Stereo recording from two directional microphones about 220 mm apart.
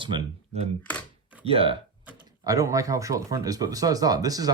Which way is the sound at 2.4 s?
15° right (ahead or behind).